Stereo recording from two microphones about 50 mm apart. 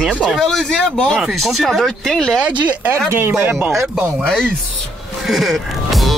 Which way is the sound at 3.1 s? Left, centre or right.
Right.